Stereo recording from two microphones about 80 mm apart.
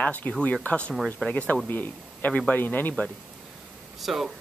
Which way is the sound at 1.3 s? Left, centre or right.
Centre.